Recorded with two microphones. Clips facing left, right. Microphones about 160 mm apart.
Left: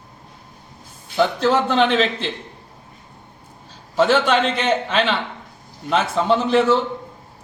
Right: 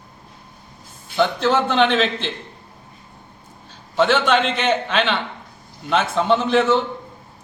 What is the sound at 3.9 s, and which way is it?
A man's voice, 5° left (ahead or behind).